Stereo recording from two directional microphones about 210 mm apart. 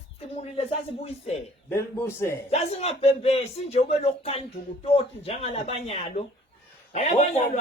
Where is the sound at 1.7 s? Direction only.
10° left (ahead or behind).